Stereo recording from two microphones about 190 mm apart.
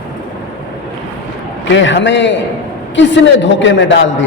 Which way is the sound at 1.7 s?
70° left (ahead or behind).